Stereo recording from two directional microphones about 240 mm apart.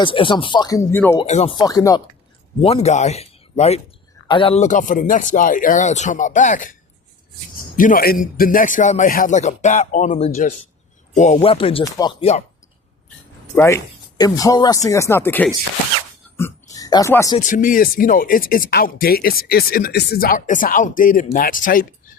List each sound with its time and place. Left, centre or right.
0.0 s speech: left
1.2 s speech: left
2.6 s speech: left
7.8 s speech: left
13.6 s speech: centre
17.3 s speech: left